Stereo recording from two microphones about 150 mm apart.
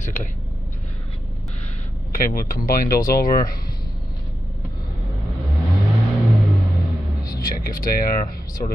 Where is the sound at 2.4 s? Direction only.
65° left (ahead or behind).